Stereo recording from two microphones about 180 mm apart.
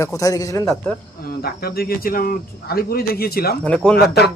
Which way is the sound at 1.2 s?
60° left (ahead or behind).